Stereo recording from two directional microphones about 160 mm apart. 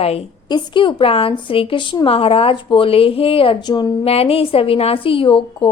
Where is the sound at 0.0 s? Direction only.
35° left (ahead or behind).